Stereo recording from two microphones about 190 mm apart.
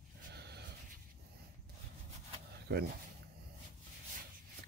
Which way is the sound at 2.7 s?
60° right (ahead or behind).